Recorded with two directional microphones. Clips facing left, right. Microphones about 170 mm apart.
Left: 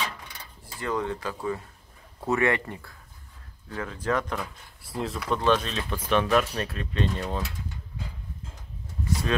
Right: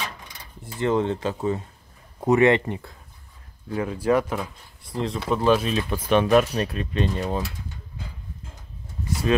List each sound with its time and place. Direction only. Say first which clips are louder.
0.7 s speech: right 7 dB; 25° right (ahead or behind); by 4.5 s 10° right (ahead or behind)
4.8 s speech: right 4 dB; 5° left (ahead or behind)
5.3 s speech: right 4 dB; 10° right (ahead or behind)